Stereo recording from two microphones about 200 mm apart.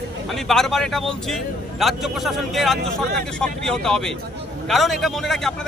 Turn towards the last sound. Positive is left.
turn(degrees=0)  # may be behind; listen again after turning